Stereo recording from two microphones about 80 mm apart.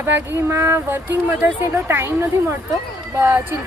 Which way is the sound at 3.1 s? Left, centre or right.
Right.